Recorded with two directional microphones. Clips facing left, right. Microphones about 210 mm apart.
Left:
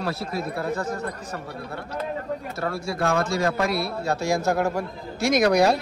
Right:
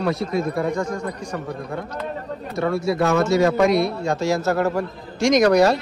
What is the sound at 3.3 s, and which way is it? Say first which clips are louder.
Speech: right 7 dB; centre (ahead or behind).